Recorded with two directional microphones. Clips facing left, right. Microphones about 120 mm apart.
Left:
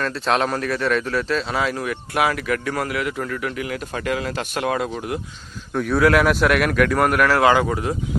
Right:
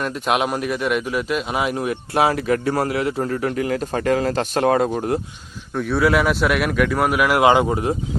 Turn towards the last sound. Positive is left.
turn(degrees=-25)  # may be behind; listen again after turning